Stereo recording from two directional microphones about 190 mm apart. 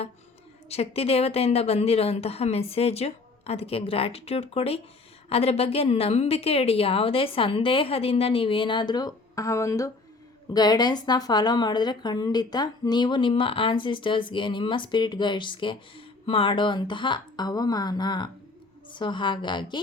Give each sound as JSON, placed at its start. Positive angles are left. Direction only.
{"t": 0.7, "sound": "speech", "side_deg": 30}